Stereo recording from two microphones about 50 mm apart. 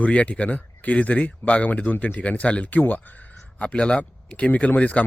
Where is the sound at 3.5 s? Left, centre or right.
Left.